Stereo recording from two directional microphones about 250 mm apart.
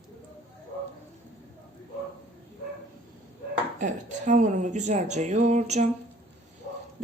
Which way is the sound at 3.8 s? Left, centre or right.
Right.